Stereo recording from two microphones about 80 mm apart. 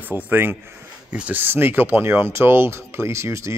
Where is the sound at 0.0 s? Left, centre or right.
Right.